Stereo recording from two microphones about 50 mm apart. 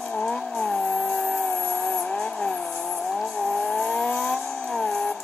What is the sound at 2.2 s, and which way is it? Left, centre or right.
Vehicle, left.